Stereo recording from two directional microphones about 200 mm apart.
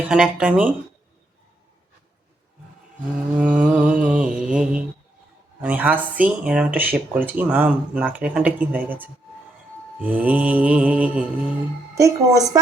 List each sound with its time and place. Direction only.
0.1 s speech: 5° right (ahead or behind)
3.3 s speech: 10° right (ahead or behind)